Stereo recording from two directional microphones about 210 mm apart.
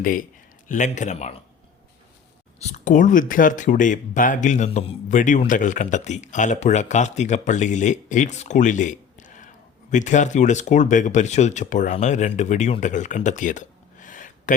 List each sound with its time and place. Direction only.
0.0 s speech: 40° left (ahead or behind)
2.6 s speech: 35° left (ahead or behind)